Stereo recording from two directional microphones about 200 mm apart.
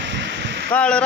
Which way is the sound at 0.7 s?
5° left (ahead or behind).